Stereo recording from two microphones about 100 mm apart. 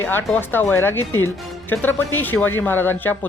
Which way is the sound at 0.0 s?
20° left (ahead or behind).